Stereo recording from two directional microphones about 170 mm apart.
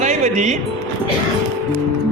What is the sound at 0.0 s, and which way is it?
Music, 45° right (ahead or behind).